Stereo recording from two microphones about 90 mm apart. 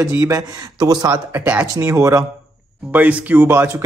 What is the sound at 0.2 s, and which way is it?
Speech, 45° right (ahead or behind).